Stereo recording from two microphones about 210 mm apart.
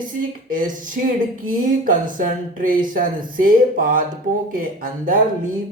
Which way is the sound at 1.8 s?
40° right (ahead or behind).